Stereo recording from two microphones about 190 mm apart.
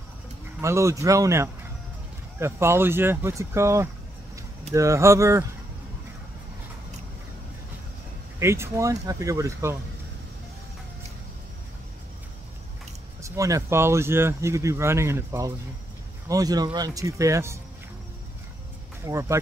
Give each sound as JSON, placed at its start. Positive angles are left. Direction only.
{"t": 0.6, "sound": "speech", "side_deg": -15}
{"t": 8.4, "sound": "speech", "side_deg": -15}
{"t": 13.2, "sound": "speech", "side_deg": -15}
{"t": 19.0, "sound": "speech", "side_deg": -15}